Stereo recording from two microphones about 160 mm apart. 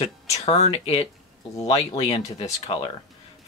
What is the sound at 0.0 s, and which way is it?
Speech, 40° left (ahead or behind).